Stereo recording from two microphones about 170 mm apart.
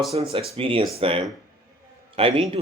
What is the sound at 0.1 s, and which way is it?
Speech, 35° right (ahead or behind).